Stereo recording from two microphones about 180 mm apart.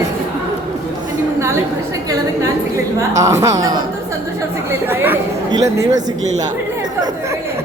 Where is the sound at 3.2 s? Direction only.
15° right (ahead or behind).